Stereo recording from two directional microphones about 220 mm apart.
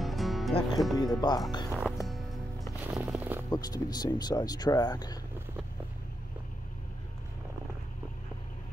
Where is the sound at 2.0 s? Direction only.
Centre (ahead or behind).